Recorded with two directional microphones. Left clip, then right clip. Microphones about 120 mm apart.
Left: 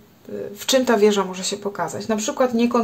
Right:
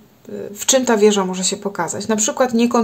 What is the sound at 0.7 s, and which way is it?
Speech, 25° right (ahead or behind).